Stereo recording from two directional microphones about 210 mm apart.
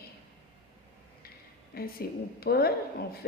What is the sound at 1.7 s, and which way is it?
A woman's voice, 45° left (ahead or behind).